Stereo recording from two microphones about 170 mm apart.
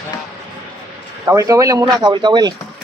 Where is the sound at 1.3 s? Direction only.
20° right (ahead or behind).